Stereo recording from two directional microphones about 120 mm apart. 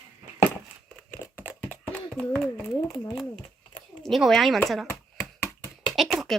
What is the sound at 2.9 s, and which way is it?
Speech, 30° left (ahead or behind).